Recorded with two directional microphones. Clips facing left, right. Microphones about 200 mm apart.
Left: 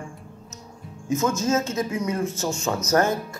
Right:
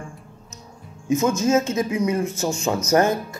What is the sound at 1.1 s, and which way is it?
A man's voice, 15° right (ahead or behind).